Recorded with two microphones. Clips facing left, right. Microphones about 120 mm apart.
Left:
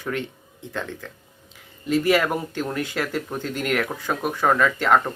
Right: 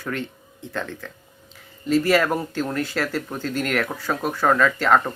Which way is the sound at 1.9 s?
15° left (ahead or behind).